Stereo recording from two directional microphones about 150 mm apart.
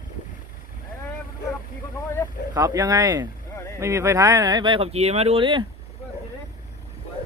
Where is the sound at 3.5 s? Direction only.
20° left (ahead or behind).